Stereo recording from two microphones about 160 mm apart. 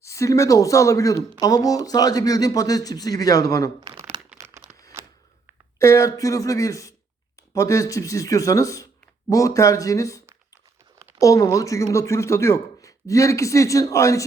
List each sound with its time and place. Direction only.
0.0 s speech: 20° left (ahead or behind)
4.4 s crumpling: 15° right (ahead or behind)
5.0 s a sound: 15° right (ahead or behind)
5.8 s speech: 20° left (ahead or behind)